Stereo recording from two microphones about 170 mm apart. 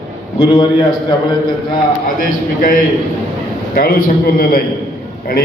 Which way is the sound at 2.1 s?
55° left (ahead or behind).